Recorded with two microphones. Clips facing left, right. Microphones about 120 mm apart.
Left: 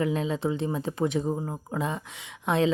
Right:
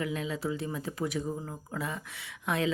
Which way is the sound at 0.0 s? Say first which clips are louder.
Left 6 dB; 30° left (ahead or behind).